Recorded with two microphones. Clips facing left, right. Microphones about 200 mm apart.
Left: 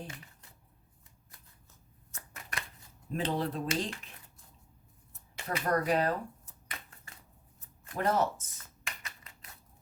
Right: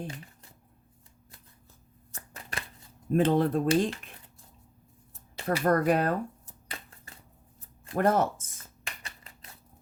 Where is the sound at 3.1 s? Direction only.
50° right (ahead or behind).